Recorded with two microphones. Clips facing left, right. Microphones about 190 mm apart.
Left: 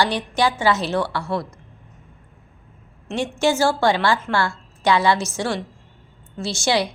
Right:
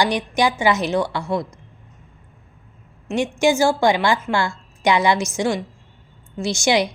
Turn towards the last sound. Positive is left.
turn(degrees=-15)  # may be behind; listen again after turning